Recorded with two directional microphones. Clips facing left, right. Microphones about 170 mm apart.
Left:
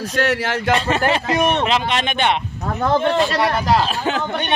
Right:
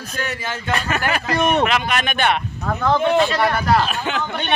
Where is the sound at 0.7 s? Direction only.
25° left (ahead or behind).